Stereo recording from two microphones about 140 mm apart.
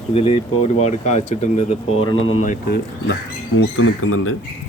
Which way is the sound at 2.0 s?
40° left (ahead or behind).